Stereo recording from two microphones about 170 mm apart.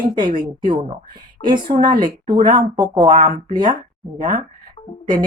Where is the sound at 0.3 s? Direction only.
50° right (ahead or behind).